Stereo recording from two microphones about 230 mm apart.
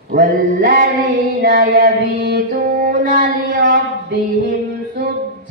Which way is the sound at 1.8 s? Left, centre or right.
Right.